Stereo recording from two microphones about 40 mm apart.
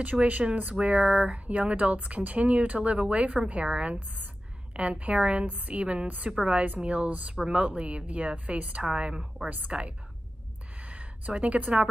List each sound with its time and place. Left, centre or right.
0.0 s speech: right
0.7 s a woman's voice: right
8.8 s a woman's voice: right
9.7 s speech: right
10.8 s a sound: right
11.4 s speech: right